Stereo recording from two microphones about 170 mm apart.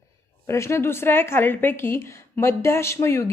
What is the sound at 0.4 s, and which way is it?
A woman's voice, 15° left (ahead or behind).